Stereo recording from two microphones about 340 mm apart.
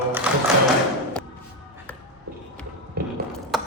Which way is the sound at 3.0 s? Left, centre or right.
Right.